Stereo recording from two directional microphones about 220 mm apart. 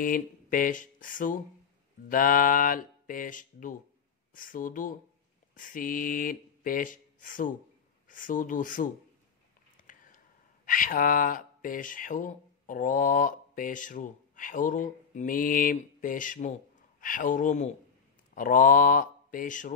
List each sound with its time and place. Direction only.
0.0 s speech: 40° left (ahead or behind)